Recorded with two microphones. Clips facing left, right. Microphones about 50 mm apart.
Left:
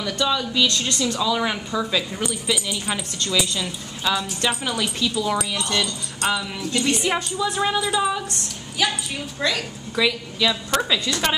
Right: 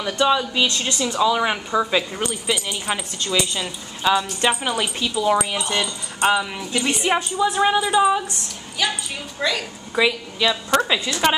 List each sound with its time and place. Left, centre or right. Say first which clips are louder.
0.0 s a woman's voice: right 4 dB; right
6.6 s speech: even; centre
8.8 s a woman's voice: left 1 dB; centre
9.9 s a woman's voice: right 2 dB; right